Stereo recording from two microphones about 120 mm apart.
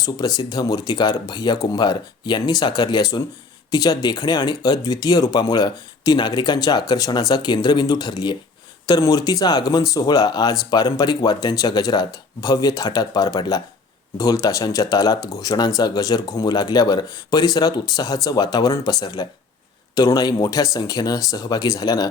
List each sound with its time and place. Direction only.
0.0 s speech: 35° left (ahead or behind)